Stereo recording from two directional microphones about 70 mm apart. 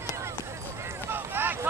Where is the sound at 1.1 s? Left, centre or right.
Right.